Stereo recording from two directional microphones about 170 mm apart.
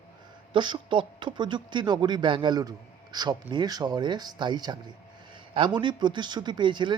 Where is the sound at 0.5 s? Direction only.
30° right (ahead or behind).